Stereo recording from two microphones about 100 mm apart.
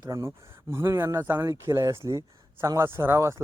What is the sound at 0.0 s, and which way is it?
Speech, 30° right (ahead or behind).